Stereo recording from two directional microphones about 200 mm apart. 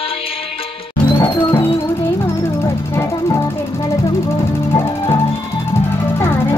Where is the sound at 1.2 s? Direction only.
25° left (ahead or behind).